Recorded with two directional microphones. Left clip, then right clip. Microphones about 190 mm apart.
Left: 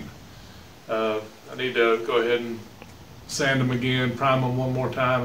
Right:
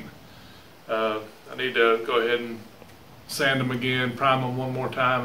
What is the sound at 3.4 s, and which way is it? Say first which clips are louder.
A man's voice: even; 10° left (ahead or behind).